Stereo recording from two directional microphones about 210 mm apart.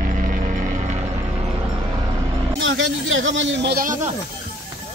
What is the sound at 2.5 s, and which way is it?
Speech, 65° right (ahead or behind).